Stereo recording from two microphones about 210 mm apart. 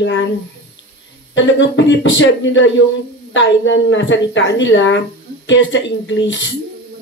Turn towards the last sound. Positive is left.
turn(degrees=60)  # may be behind; listen again after turning